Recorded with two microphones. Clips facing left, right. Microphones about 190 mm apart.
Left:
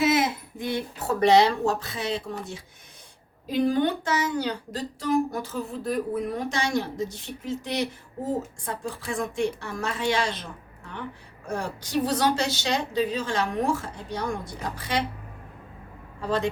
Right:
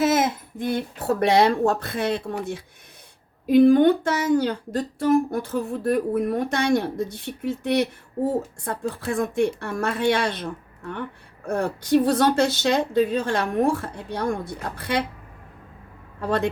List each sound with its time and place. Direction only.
0.0 s a sound: 45° right (ahead or behind)
0.9 s speech: 55° right (ahead or behind)
16.2 s speech: 60° right (ahead or behind)